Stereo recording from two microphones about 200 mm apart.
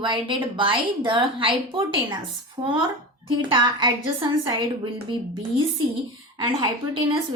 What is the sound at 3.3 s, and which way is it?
A woman's voice, 25° right (ahead or behind).